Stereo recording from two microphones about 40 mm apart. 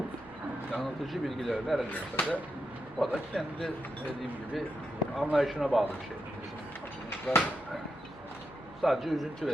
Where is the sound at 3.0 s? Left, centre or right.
Centre.